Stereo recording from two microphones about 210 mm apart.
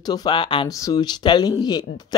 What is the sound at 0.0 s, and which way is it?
Speech, 20° left (ahead or behind).